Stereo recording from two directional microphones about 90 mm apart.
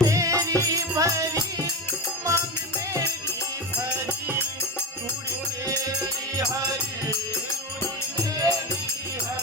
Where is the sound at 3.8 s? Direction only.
30° right (ahead or behind).